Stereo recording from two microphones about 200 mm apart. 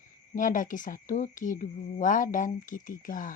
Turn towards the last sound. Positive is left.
turn(degrees=40)  # may be behind; listen again after turning